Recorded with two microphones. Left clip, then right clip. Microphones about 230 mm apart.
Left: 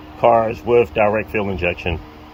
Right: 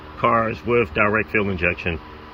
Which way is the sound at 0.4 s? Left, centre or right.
Centre.